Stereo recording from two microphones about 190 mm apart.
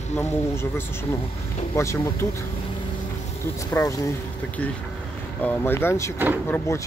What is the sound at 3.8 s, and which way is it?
Speech, 20° left (ahead or behind).